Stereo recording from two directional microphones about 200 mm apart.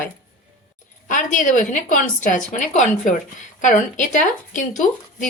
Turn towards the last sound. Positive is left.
turn(degrees=40)  # may be behind; listen again after turning